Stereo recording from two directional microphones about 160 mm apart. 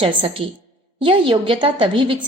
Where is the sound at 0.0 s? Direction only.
35° right (ahead or behind).